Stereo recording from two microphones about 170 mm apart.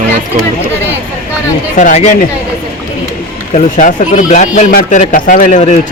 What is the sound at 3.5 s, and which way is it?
Speech, 45° left (ahead or behind).